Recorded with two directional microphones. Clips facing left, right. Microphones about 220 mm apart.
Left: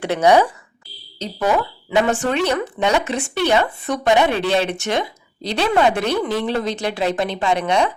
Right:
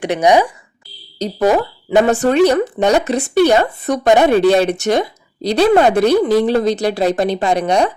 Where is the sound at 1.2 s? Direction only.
40° right (ahead or behind).